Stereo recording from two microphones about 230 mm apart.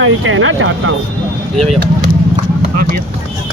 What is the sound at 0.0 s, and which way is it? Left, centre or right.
Speech, right.